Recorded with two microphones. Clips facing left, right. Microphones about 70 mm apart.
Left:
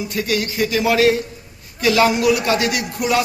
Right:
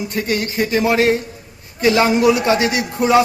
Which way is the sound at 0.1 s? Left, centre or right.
Right.